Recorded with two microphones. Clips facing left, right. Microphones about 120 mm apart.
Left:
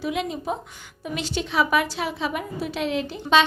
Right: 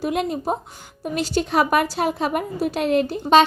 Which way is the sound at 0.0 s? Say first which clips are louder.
Right 4 dB; 50° right (ahead or behind).